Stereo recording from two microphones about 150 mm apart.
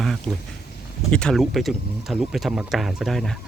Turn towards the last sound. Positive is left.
turn(degrees=0)  # may be behind; listen again after turning